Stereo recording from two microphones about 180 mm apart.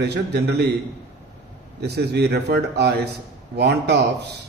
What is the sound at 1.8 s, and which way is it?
A man's voice, 65° right (ahead or behind).